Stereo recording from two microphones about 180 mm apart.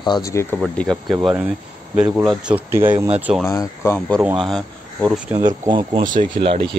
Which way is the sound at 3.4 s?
15° left (ahead or behind).